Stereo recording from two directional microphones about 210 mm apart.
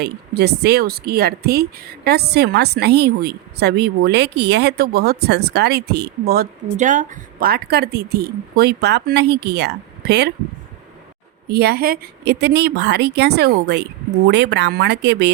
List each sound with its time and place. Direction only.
0.0 s speech: 50° right (ahead or behind)
11.4 s speech: 50° right (ahead or behind)